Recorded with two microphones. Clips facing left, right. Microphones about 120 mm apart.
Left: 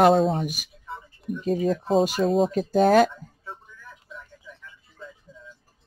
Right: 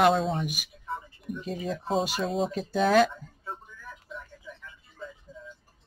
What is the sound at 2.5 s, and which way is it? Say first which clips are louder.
Speech: left 2 dB; 45° left (ahead or behind).